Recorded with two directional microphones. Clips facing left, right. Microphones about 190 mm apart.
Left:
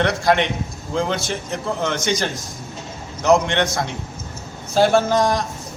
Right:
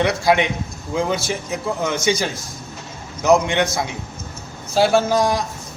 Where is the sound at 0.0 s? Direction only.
5° right (ahead or behind).